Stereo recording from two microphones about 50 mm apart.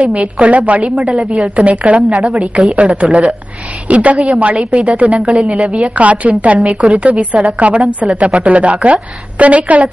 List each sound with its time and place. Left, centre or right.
0.0 s a woman's voice: right
1.1 s a woman's voice: centre
1.6 s a woman's voice: right
2.0 s a woman's voice: centre
2.6 s a woman's voice: centre
5.5 s a woman's voice: centre
5.9 s a woman's voice: right
9.4 s a woman's voice: right